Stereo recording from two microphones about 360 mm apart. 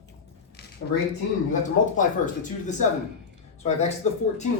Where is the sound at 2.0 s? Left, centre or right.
Left.